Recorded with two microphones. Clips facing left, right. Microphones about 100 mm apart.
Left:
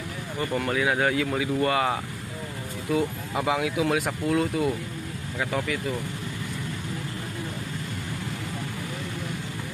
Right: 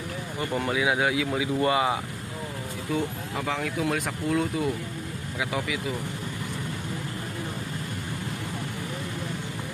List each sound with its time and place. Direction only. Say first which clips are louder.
0.4 s speech: left 1 dB; 15° right (ahead or behind)
3.3 s speech: left 4 dB; 10° left (ahead or behind); by 5.8 s 5° right (ahead or behind)